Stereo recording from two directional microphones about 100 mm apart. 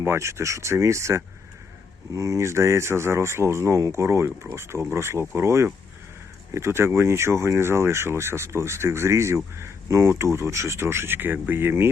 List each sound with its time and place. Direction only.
0.0 s speech: 25° right (ahead or behind)